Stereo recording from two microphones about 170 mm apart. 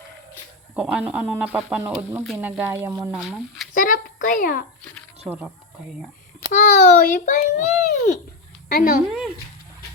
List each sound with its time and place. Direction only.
0.8 s speech: 10° right (ahead or behind)
3.8 s a child's voice: 55° left (ahead or behind)
5.2 s speech: 10° right (ahead or behind)
6.5 s a child's voice: 50° left (ahead or behind)
9.0 s speech: 5° right (ahead or behind)